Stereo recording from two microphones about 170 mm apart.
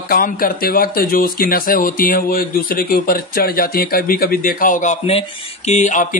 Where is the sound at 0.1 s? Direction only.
60° left (ahead or behind).